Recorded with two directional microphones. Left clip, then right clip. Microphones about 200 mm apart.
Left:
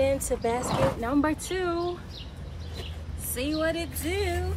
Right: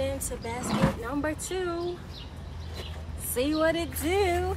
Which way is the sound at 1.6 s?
10° left (ahead or behind).